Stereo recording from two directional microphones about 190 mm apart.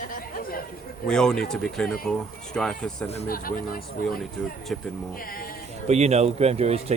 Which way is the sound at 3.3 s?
50° left (ahead or behind).